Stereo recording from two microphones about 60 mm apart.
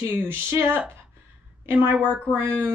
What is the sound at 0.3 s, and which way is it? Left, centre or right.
Speech, right.